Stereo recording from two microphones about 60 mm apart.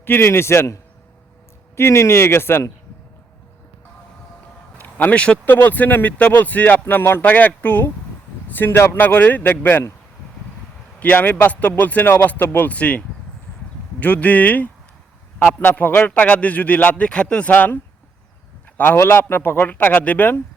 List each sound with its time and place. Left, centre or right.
0.0 s speech: left
4.8 s speech: left
5.5 s speech: left
7.3 s speech: left
11.0 s speech: left
16.1 s speech: left
18.8 s speech: left